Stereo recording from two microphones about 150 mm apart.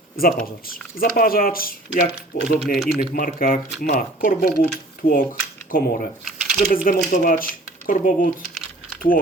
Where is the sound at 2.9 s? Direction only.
70° left (ahead or behind).